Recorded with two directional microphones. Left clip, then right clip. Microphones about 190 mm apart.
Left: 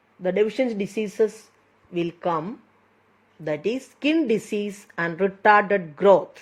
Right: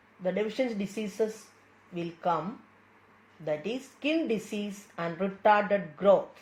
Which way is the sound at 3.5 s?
65° left (ahead or behind).